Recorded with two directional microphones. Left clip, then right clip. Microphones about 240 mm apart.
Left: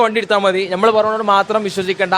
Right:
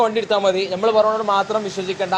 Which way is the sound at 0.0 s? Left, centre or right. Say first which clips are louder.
Left 3 dB; left.